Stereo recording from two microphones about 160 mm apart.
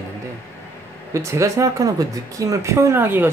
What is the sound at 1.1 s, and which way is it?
Speech, 20° right (ahead or behind).